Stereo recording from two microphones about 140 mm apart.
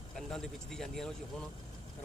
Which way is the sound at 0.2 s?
5° left (ahead or behind).